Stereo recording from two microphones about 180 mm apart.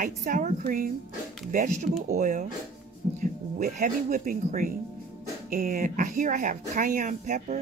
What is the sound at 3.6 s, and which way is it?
Speech, 45° right (ahead or behind).